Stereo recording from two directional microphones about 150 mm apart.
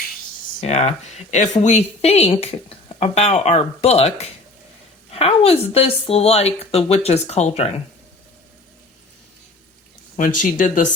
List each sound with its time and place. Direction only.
0.6 s speech: 45° left (ahead or behind)
10.2 s speech: 60° left (ahead or behind)